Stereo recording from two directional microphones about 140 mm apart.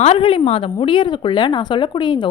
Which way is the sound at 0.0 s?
45° left (ahead or behind).